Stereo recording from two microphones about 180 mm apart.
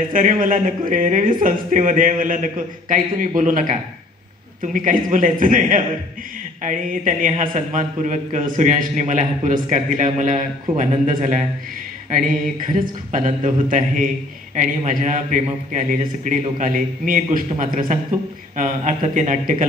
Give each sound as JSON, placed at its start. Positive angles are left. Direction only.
{"t": 0.1, "sound": "a man's voice", "side_deg": -50}
{"t": 12.6, "sound": "a man's voice", "side_deg": -50}